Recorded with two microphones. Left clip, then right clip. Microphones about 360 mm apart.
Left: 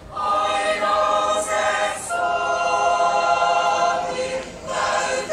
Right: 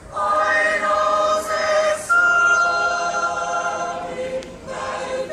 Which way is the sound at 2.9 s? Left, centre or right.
Left.